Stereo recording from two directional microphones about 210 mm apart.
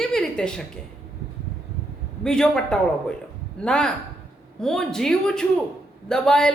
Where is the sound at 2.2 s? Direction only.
5° left (ahead or behind).